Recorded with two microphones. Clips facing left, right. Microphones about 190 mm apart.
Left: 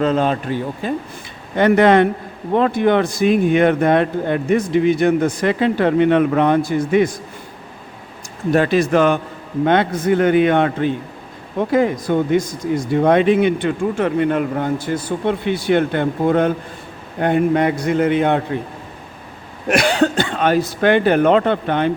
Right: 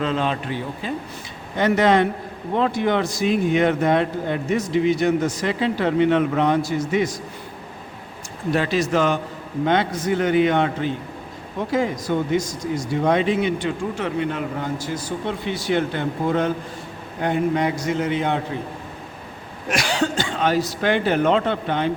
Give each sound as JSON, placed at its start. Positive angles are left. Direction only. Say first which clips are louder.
{"t": 0.0, "sound": "speech", "louder": "left 6 dB", "side_deg": 45}
{"t": 1.5, "sound": "speech", "louder": "left 5 dB", "side_deg": 60}
{"t": 8.4, "sound": "speech", "louder": "left 6 dB", "side_deg": 50}
{"t": 19.6, "sound": "speech", "louder": "left 7 dB", "side_deg": 60}